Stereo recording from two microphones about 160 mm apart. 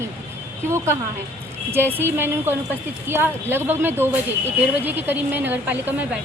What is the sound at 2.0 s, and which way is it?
Speech, 15° right (ahead or behind).